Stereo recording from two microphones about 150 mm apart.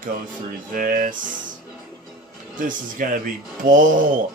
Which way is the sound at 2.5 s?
65° right (ahead or behind).